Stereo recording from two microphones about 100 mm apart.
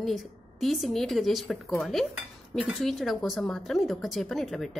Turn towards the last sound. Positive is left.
turn(degrees=0)  # may be behind; listen again after turning